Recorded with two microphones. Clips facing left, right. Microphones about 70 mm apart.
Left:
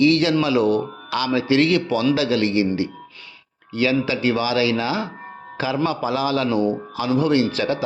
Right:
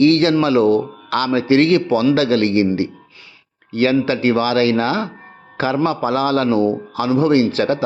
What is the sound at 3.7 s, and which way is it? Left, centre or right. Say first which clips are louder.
A man's voice: right 4 dB; right.